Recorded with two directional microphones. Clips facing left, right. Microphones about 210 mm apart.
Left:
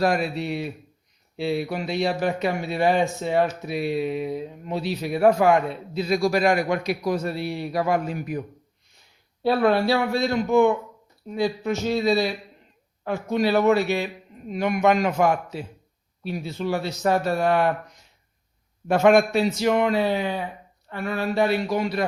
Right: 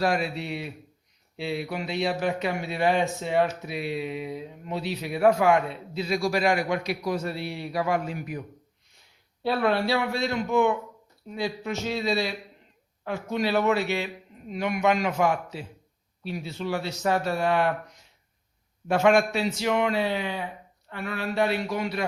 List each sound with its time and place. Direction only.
0.0 s speech: 45° left (ahead or behind)
9.4 s a man's voice: 45° left (ahead or behind)
18.9 s a man's voice: 45° left (ahead or behind)